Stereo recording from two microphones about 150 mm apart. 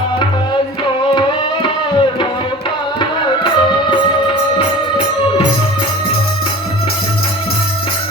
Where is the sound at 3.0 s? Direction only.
30° left (ahead or behind).